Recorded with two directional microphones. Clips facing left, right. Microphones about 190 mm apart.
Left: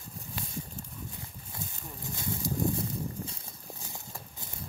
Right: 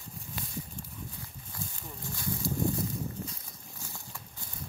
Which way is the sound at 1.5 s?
20° left (ahead or behind).